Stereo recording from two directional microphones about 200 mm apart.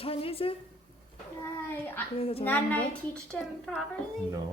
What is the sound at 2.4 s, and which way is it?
A woman's voice, 10° left (ahead or behind).